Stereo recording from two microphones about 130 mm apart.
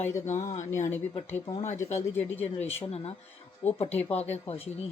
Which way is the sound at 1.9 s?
60° left (ahead or behind).